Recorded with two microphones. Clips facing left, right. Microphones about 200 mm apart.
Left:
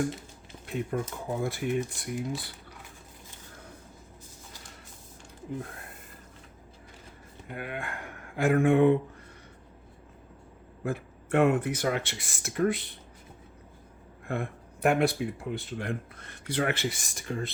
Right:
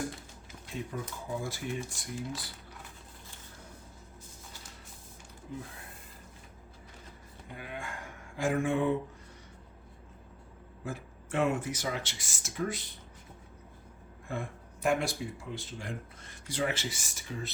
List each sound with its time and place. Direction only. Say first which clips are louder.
0.7 s speech: left 7 dB; 60° left (ahead or behind)
7.4 s speech: left 5 dB; 65° left (ahead or behind)
10.8 s speech: left 7 dB; 60° left (ahead or behind)
14.3 s speech: left 5 dB; 60° left (ahead or behind)